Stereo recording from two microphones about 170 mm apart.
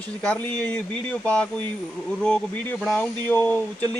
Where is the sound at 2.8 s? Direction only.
5° left (ahead or behind).